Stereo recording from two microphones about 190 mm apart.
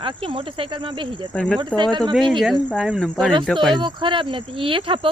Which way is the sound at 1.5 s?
25° right (ahead or behind).